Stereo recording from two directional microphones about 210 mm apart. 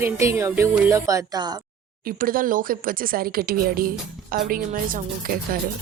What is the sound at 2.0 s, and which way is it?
Speech, 40° right (ahead or behind).